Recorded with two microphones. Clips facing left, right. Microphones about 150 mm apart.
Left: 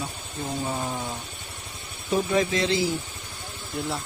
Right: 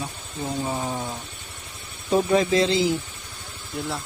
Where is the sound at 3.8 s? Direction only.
Centre (ahead or behind).